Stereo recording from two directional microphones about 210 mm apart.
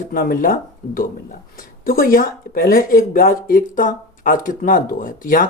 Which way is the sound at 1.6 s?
45° left (ahead or behind).